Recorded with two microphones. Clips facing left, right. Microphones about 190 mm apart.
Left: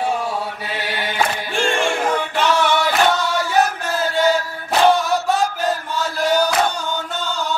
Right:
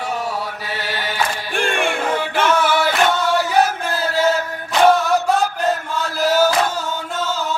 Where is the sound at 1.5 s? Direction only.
55° right (ahead or behind).